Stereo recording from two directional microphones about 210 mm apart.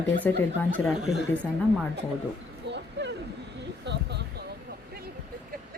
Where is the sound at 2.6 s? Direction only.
55° right (ahead or behind).